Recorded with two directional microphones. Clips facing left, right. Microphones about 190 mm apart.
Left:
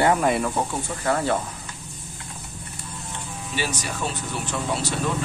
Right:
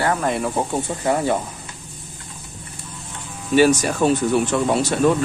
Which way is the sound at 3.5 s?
50° right (ahead or behind).